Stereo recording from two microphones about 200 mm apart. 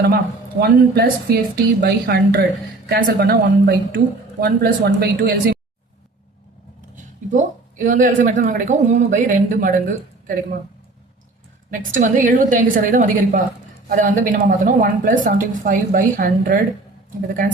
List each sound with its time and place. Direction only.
0.6 s a woman's voice: 50° right (ahead or behind)
6.9 s speech: 40° right (ahead or behind)
11.7 s a woman's voice: 40° right (ahead or behind)